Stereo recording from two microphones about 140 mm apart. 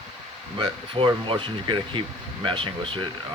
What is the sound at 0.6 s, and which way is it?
Speech, 35° right (ahead or behind).